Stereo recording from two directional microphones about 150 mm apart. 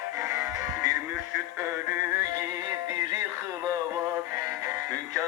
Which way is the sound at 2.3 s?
20° right (ahead or behind).